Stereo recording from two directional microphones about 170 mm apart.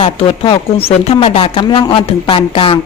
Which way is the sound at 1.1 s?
35° left (ahead or behind).